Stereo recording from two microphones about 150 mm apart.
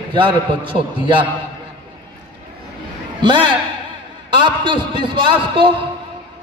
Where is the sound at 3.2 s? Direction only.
35° right (ahead or behind).